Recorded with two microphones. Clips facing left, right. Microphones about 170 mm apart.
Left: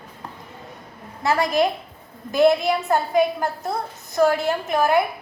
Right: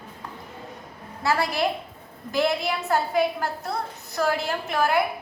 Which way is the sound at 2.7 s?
20° left (ahead or behind).